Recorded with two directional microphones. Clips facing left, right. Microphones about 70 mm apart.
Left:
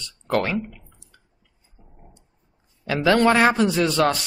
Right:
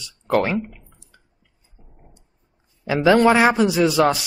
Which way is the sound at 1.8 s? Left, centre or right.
Centre.